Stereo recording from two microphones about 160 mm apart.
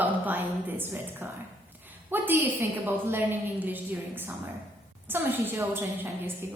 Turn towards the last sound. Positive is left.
turn(degrees=-15)  # may be behind; listen again after turning